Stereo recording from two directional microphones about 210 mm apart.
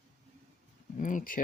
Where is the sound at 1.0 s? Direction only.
40° left (ahead or behind).